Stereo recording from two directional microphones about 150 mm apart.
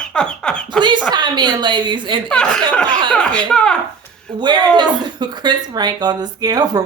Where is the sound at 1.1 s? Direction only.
30° right (ahead or behind).